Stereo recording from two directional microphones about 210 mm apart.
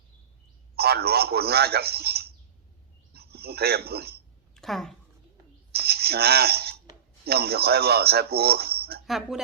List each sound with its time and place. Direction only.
0.8 s speech: 50° right (ahead or behind)
4.5 s a woman's voice: centre (ahead or behind)
5.7 s a sound: 50° right (ahead or behind)
7.3 s speech: 50° right (ahead or behind)
9.0 s speech: centre (ahead or behind)